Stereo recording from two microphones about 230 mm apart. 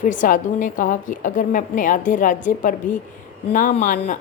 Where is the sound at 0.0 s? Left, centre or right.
Left.